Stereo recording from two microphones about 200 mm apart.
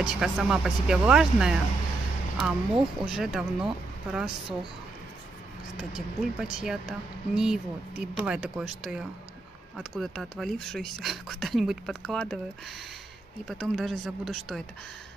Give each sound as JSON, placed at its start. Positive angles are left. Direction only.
{"t": 0.0, "sound": "speech", "side_deg": -5}
{"t": 5.8, "sound": "speech", "side_deg": 0}
{"t": 13.5, "sound": "speech", "side_deg": 0}